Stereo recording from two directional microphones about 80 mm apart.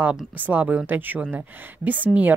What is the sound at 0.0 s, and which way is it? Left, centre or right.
A woman's voice, centre.